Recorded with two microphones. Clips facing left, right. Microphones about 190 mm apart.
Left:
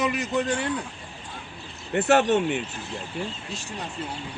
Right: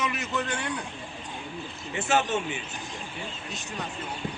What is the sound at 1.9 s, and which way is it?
Speech, 65° left (ahead or behind).